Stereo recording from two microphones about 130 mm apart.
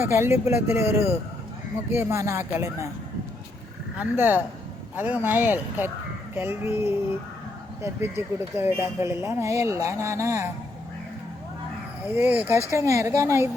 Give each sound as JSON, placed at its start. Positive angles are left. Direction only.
{"t": 0.0, "sound": "speech", "side_deg": -20}
{"t": 3.9, "sound": "speech", "side_deg": -10}
{"t": 12.0, "sound": "speech", "side_deg": -15}